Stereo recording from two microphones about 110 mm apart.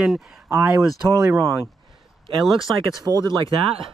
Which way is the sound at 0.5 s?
25° right (ahead or behind).